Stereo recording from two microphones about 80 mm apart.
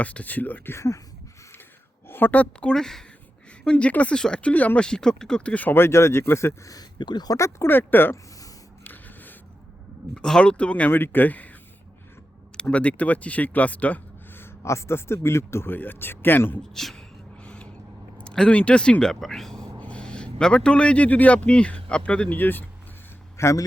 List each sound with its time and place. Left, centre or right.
0.0 s a man's voice: centre; by 1.0 s left
2.0 s speech: left
7.0 s speech: left
7.3 s speech: left
7.7 s a man's voice: left
8.8 s snort: left
10.2 s a man's voice: centre
12.6 s speech: centre
14.4 s speech: left
16.7 s speech: centre
17.4 s a sound: centre
18.2 s a man's voice: centre
23.4 s speech: left